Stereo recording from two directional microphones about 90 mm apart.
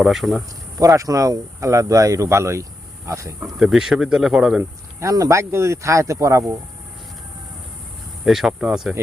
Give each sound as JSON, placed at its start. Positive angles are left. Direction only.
{"t": 0.0, "sound": "speech", "side_deg": 0}
{"t": 0.8, "sound": "speech", "side_deg": -40}
{"t": 3.6, "sound": "speech", "side_deg": -5}
{"t": 4.9, "sound": "speech", "side_deg": -40}
{"t": 8.2, "sound": "speech", "side_deg": -5}